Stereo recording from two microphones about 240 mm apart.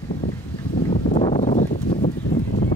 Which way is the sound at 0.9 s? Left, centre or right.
Left.